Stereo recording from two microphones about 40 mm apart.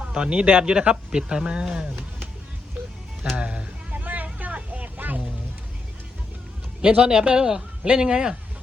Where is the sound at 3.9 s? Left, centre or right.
Right.